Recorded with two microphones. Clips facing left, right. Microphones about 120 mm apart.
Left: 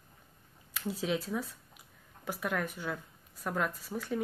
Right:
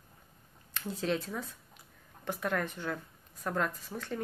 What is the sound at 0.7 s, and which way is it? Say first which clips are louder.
Speech: even; 5° left (ahead or behind).